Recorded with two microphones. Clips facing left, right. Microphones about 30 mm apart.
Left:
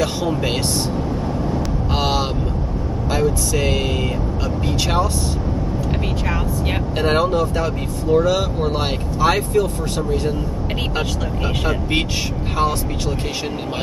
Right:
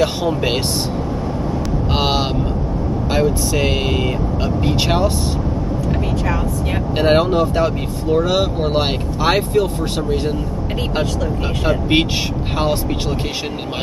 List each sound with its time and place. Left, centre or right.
2.0 s speech: right
7.0 s speech: centre